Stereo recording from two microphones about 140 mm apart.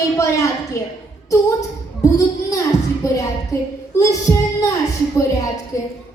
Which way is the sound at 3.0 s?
25° left (ahead or behind).